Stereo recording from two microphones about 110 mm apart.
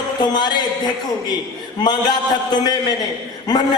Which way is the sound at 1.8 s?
40° left (ahead or behind).